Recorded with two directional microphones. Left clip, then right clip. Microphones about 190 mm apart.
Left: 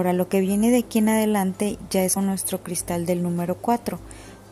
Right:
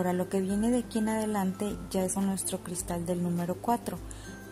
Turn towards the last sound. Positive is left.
turn(degrees=20)  # may be behind; listen again after turning